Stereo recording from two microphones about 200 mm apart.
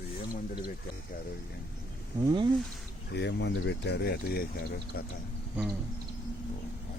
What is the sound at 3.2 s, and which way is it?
Speech, 60° left (ahead or behind).